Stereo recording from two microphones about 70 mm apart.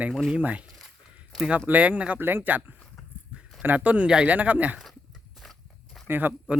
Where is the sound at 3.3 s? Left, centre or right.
Centre.